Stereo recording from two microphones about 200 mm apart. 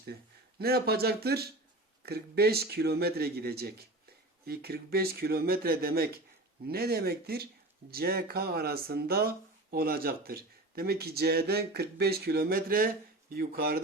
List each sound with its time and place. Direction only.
0.6 s speech: 50° right (ahead or behind)